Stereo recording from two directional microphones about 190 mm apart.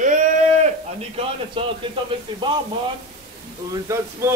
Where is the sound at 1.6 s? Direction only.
25° right (ahead or behind).